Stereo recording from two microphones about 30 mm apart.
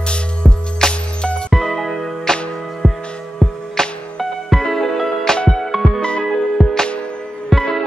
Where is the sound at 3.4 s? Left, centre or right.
Right.